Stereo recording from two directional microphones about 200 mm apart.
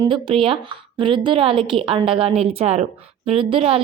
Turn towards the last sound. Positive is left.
turn(degrees=-30)  # may be behind; listen again after turning